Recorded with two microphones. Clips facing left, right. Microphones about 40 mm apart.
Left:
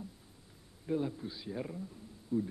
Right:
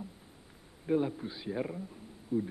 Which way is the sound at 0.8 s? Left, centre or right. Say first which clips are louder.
Right 4 dB; right.